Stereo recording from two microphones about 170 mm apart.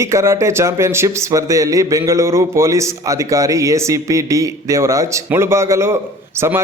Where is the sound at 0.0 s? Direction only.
15° right (ahead or behind).